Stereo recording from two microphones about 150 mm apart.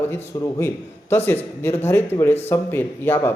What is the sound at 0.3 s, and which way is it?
A man's voice, 20° left (ahead or behind).